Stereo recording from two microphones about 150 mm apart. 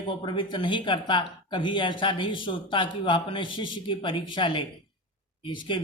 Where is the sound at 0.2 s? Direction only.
35° left (ahead or behind).